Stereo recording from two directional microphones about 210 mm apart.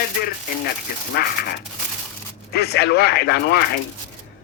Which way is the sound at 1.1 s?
45° left (ahead or behind).